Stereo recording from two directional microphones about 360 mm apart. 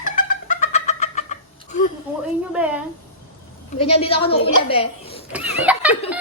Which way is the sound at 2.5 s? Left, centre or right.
Centre.